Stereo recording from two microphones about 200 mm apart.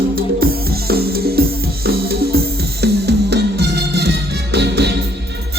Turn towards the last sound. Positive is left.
turn(degrees=-55)  # may be behind; listen again after turning